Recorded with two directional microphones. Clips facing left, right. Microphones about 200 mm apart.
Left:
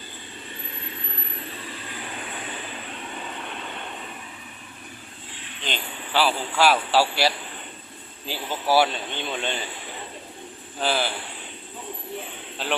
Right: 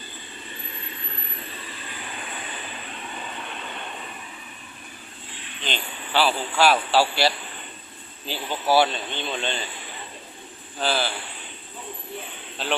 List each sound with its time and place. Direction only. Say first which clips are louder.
5.6 s speech: even; 10° left (ahead or behind)
10.8 s speech: even; 15° left (ahead or behind)